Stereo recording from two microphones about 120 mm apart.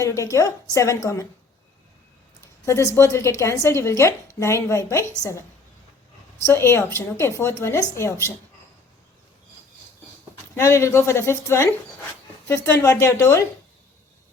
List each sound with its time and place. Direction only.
0.0 s a woman's voice: 25° left (ahead or behind)
2.6 s a woman's voice: 25° left (ahead or behind)
6.4 s a woman's voice: 20° left (ahead or behind)
10.5 s a woman's voice: 25° left (ahead or behind)